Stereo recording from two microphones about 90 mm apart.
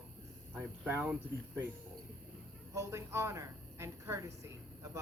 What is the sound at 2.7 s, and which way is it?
A woman's voice, 35° right (ahead or behind).